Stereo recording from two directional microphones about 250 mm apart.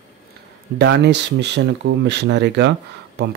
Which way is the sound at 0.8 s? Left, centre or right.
Right.